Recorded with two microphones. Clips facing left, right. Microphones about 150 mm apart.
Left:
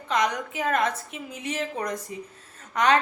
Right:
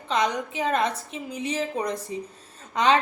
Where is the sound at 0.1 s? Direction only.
30° right (ahead or behind).